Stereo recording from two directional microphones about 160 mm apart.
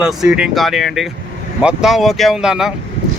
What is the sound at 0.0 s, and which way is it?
Speech, 5° right (ahead or behind).